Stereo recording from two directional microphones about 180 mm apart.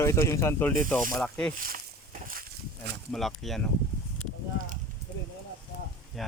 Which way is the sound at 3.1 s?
Centre (ahead or behind).